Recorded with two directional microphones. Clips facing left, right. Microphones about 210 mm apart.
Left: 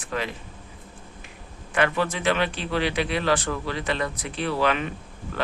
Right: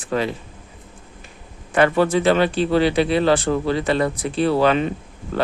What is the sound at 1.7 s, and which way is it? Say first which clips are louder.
A man's voice: right 8 dB; 35° right (ahead or behind).